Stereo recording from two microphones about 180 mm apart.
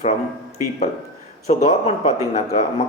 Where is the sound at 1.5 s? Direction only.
35° left (ahead or behind).